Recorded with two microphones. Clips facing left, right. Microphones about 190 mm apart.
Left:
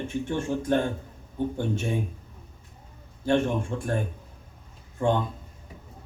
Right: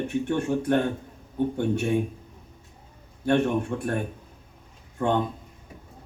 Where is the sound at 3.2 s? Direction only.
65° right (ahead or behind).